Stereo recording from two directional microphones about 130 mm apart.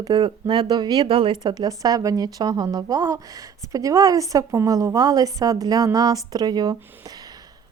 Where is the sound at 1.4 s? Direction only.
30° right (ahead or behind).